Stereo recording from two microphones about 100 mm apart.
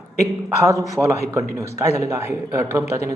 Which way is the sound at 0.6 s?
30° right (ahead or behind).